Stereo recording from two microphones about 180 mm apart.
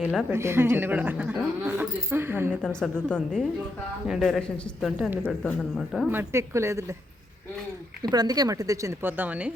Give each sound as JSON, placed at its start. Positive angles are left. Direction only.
{"t": 0.0, "sound": "a man's voice", "side_deg": 0}
{"t": 0.3, "sound": "speech", "side_deg": -15}
{"t": 2.6, "sound": "a man's voice", "side_deg": 5}
{"t": 4.9, "sound": "a man's voice", "side_deg": -5}
{"t": 5.2, "sound": "a man's voice", "side_deg": 5}
{"t": 6.1, "sound": "speech", "side_deg": -15}
{"t": 8.0, "sound": "speech", "side_deg": -20}